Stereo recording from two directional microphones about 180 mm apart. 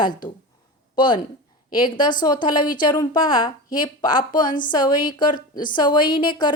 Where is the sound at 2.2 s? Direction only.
25° left (ahead or behind).